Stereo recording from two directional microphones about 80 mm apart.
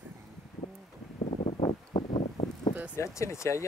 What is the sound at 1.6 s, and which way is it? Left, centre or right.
Wind, left.